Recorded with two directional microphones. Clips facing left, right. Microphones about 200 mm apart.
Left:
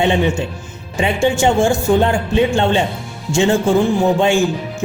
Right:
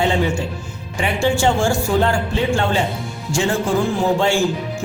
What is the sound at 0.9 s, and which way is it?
Speech, 20° left (ahead or behind).